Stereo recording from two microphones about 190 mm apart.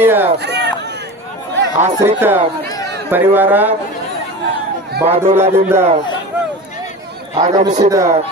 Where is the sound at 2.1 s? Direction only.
10° right (ahead or behind).